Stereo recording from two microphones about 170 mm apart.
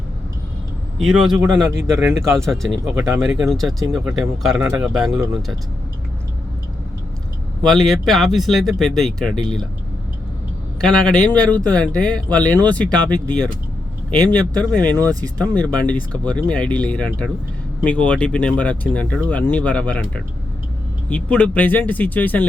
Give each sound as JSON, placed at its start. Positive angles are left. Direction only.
{"t": 0.9, "sound": "speech", "side_deg": -5}
{"t": 1.7, "sound": "speech", "side_deg": -15}
{"t": 2.3, "sound": "speech", "side_deg": 0}
{"t": 7.6, "sound": "speech", "side_deg": 0}
{"t": 10.8, "sound": "speech", "side_deg": 5}